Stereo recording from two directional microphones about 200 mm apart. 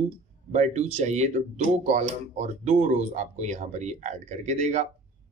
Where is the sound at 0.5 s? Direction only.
35° right (ahead or behind).